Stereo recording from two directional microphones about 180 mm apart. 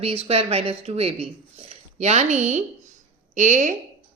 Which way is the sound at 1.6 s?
35° right (ahead or behind).